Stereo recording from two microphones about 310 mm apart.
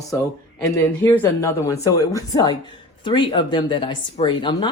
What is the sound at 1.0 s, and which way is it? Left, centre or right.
Speech, centre.